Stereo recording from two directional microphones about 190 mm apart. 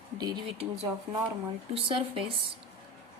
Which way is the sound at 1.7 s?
30° right (ahead or behind).